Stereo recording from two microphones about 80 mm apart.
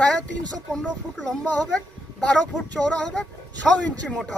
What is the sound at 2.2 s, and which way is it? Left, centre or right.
Speech, centre.